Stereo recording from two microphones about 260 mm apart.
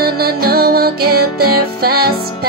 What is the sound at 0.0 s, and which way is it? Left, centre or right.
Music, right.